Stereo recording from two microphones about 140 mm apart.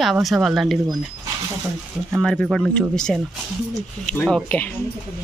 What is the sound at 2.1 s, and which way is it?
Speech, centre (ahead or behind).